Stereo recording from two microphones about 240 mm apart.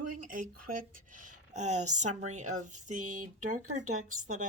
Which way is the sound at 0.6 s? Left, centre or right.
Right.